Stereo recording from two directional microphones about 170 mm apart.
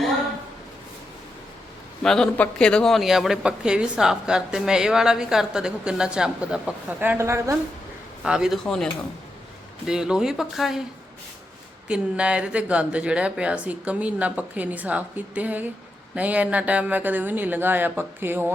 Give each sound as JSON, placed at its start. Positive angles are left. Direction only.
{"t": 2.0, "sound": "speech", "side_deg": 5}
{"t": 8.2, "sound": "speech", "side_deg": -5}
{"t": 11.9, "sound": "speech", "side_deg": -5}